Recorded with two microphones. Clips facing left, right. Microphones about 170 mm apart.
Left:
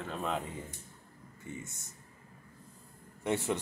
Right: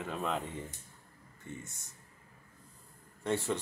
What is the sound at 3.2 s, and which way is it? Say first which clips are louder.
Speech: left 1 dB; 15° left (ahead or behind).